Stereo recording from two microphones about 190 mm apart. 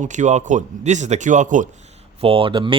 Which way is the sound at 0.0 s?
40° right (ahead or behind).